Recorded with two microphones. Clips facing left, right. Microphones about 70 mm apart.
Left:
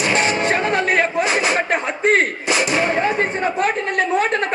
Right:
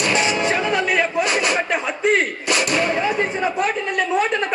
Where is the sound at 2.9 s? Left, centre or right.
Left.